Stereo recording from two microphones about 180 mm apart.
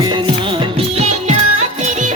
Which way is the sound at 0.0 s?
25° right (ahead or behind).